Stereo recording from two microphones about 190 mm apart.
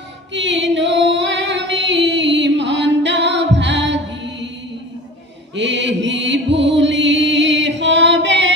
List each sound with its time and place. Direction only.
0.3 s female singing: 70° right (ahead or behind)
5.6 s music: 70° right (ahead or behind)